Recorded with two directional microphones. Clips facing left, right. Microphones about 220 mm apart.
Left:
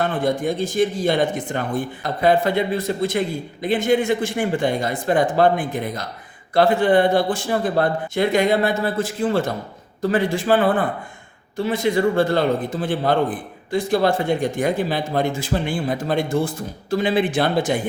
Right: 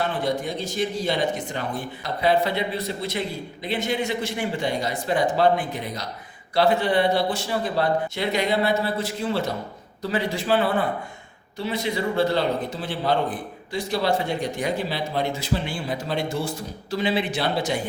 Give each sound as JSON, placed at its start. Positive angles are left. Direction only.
{"t": 0.0, "sound": "a man's voice", "side_deg": 50}